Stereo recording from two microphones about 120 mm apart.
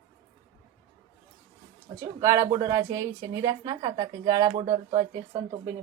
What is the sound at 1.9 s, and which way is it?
A woman's voice, 25° right (ahead or behind).